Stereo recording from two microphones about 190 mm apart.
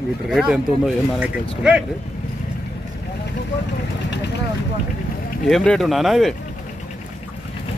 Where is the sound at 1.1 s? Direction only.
5° right (ahead or behind).